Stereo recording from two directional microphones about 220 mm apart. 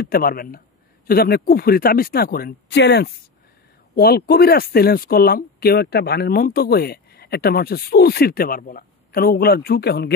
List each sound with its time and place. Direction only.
0.0 s speech: 45° left (ahead or behind)